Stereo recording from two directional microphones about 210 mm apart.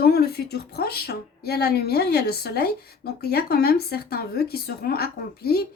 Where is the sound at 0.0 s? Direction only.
50° left (ahead or behind).